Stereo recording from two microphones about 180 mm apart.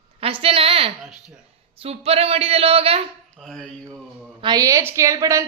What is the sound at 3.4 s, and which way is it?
Mantra, 5° left (ahead or behind).